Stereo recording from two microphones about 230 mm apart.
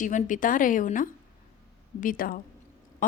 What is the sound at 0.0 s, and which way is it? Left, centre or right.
A woman's voice, left.